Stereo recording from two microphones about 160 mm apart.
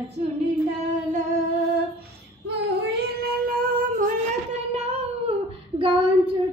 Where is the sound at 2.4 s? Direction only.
80° right; by 4.0 s 60° right (ahead or behind).